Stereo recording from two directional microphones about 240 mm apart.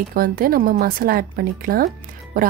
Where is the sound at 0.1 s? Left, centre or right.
Right.